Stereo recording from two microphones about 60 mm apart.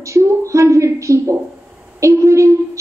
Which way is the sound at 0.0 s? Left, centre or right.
Right.